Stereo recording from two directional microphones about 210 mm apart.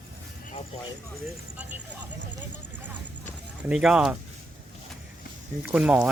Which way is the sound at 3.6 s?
5° right (ahead or behind).